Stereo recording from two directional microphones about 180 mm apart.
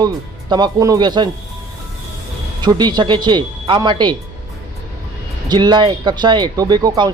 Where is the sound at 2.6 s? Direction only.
25° right (ahead or behind).